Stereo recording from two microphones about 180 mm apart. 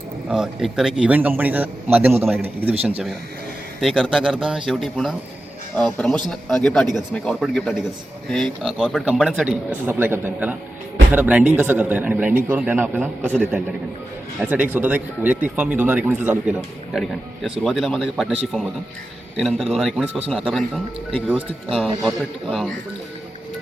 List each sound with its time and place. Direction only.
0.3 s a man's voice: 5° right (ahead or behind)
3.8 s a man's voice: centre (ahead or behind)
14.5 s a man's voice: 10° right (ahead or behind)